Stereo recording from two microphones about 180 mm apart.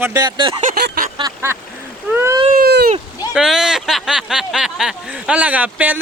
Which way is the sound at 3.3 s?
5° right (ahead or behind).